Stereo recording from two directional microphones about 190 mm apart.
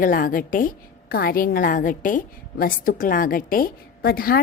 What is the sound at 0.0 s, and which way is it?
A woman's voice, 45° left (ahead or behind).